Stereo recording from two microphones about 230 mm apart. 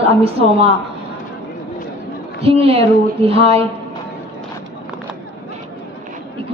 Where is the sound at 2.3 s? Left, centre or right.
Right.